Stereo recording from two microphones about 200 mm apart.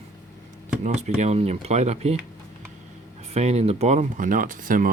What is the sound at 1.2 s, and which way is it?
Speech, 35° right (ahead or behind).